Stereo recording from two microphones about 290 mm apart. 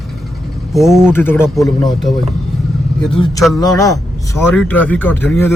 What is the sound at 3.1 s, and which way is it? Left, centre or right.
A man's voice, centre.